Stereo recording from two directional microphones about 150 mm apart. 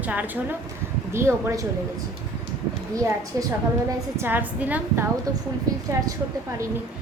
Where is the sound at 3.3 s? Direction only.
20° right (ahead or behind).